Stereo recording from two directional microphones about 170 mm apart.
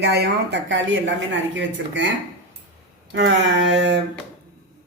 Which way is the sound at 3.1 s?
90° right.